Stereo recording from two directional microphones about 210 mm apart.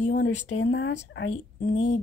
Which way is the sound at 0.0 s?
60° left (ahead or behind).